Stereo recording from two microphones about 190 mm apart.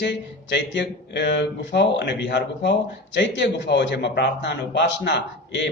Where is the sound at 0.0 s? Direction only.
65° left (ahead or behind).